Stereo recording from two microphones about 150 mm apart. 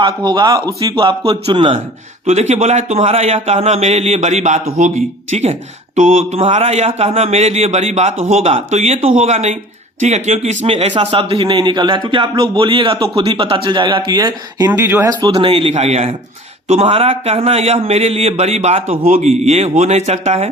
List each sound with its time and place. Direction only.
0.0 s a man's voice: 30° right (ahead or behind)
14.7 s a man's voice: 15° right (ahead or behind); by 20.5 s 45° right (ahead or behind)